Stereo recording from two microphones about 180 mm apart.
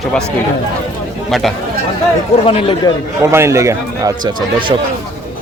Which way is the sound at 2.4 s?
30° left (ahead or behind).